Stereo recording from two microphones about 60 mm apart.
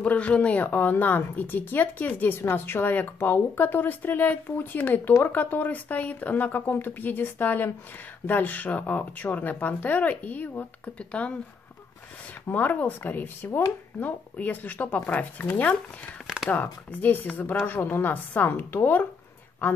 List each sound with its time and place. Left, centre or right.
0.0 s speech: left
12.4 s speech: left
13.5 s speech: left
13.9 s speech: left
16.9 s speech: left